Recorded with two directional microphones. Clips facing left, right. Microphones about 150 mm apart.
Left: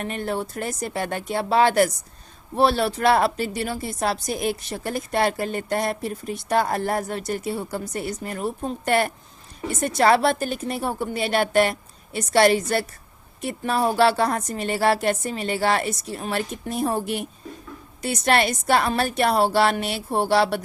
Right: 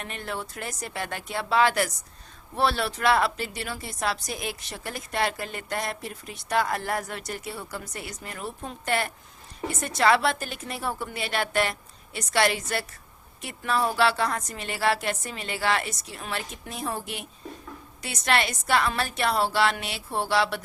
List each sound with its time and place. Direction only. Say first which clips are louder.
0.0 s speech: left 7 dB; 40° left (ahead or behind)
11.1 s a woman's voice: left 9 dB; 30° left (ahead or behind)
18.0 s speech: left 5 dB; 40° left (ahead or behind)
19.0 s speech: left 6 dB; 50° left (ahead or behind)